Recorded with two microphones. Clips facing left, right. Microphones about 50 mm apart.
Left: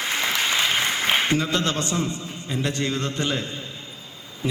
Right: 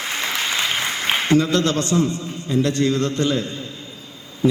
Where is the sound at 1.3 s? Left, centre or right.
Left.